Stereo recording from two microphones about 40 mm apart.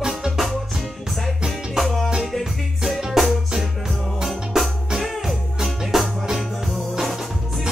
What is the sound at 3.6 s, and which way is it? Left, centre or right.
Music, centre.